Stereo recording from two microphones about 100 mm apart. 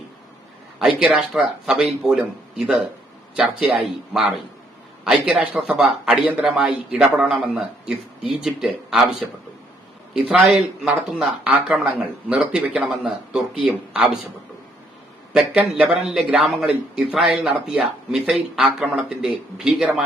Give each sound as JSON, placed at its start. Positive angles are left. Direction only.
{"t": 0.8, "sound": "speech", "side_deg": -5}
{"t": 10.2, "sound": "speech", "side_deg": -15}
{"t": 15.3, "sound": "speech", "side_deg": -10}